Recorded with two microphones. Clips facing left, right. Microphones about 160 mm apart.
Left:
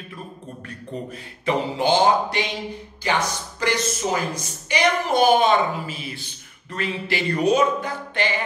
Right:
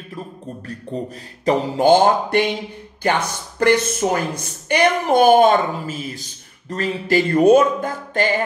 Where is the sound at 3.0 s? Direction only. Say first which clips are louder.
Right 4 dB; 55° right (ahead or behind).